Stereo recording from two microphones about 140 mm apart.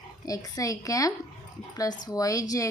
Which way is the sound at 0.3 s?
25° left (ahead or behind).